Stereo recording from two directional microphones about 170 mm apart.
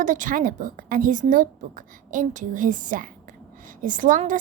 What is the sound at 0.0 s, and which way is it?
Speech, 50° right (ahead or behind).